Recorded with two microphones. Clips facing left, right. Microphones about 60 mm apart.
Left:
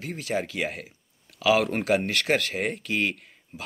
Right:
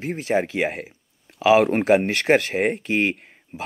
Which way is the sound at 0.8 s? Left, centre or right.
Right.